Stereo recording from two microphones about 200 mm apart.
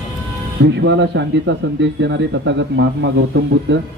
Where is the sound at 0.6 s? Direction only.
60° right (ahead or behind).